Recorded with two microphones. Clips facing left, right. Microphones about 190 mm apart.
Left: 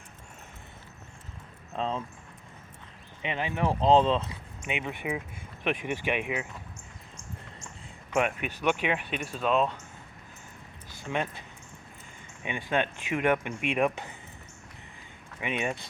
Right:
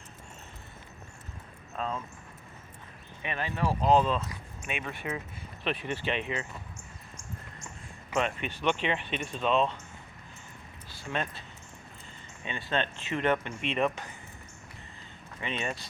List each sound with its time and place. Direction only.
1.7 s speech: 25° left (ahead or behind)
3.2 s speech: 20° left (ahead or behind)
8.3 s speech: 5° left (ahead or behind)
11.0 s speech: 15° left (ahead or behind)
12.5 s speech: 15° left (ahead or behind)
15.4 s speech: 10° left (ahead or behind)